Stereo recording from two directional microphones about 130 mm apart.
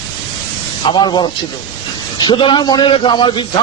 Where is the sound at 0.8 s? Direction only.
35° left (ahead or behind).